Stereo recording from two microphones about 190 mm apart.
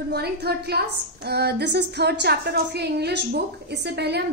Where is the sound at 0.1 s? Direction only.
55° right (ahead or behind).